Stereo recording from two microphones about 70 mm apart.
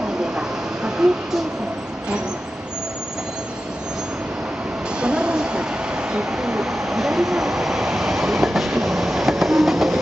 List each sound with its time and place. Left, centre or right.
0.4 s vehicle: centre
5.0 s a sound: centre
6.1 s vehicle: centre